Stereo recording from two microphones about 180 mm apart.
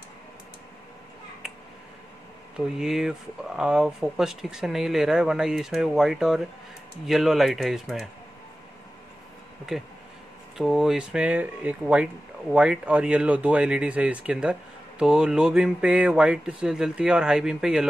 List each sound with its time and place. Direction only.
2.5 s speech: centre (ahead or behind)
9.7 s speech: centre (ahead or behind)